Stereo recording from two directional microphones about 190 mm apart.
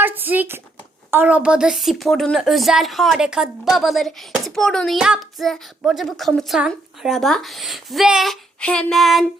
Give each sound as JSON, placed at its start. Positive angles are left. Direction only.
{"t": 0.0, "sound": "a woman's voice", "side_deg": -10}